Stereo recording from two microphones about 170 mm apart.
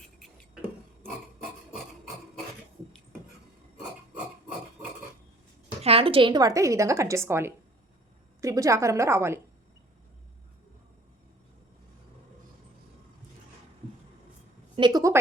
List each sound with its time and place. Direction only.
5.8 s a woman's voice: 35° right (ahead or behind); by 9.4 s 15° right (ahead or behind)
14.8 s a woman's voice: 25° right (ahead or behind)